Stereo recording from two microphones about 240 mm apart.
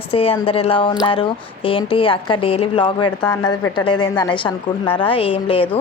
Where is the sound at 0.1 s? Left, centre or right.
Left.